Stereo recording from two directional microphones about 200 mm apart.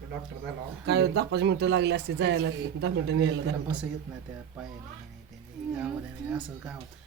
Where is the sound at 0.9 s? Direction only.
55° right (ahead or behind).